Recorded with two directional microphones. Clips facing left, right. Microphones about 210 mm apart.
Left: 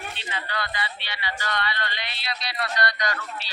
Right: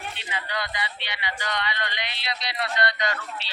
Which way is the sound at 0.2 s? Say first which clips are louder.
Even; 15° right (ahead or behind).